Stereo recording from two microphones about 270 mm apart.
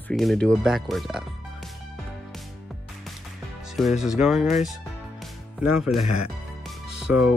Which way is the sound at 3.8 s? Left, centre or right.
Centre.